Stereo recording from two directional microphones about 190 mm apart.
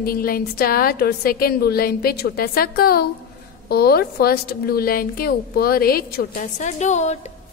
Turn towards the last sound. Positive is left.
turn(degrees=35)  # may be behind; listen again after turning